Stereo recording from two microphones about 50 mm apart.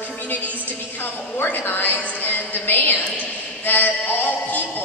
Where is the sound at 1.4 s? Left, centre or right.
Left.